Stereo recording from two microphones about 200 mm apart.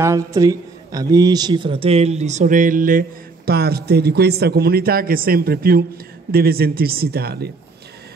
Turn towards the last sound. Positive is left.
turn(degrees=-50)  # may be behind; listen again after turning